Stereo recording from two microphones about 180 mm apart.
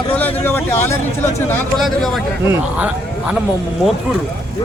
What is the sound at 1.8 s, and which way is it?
Speech, centre (ahead or behind).